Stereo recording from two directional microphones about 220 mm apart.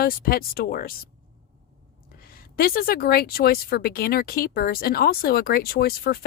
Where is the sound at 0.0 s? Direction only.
40° left (ahead or behind).